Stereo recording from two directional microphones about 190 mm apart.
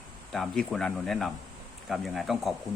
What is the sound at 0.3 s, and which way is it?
Speech, centre (ahead or behind).